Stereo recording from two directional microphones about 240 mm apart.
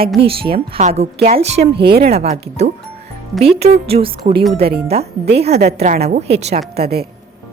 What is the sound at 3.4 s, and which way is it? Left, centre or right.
Speech, right.